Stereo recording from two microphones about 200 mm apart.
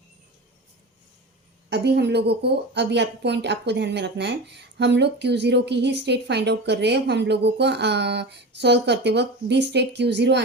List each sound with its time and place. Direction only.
1.7 s a woman's voice: 55° right (ahead or behind)